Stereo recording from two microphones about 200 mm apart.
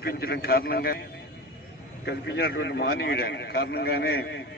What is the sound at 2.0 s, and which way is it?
A man's voice, 55° left (ahead or behind).